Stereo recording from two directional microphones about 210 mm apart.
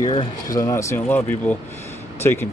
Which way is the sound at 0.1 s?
20° left (ahead or behind).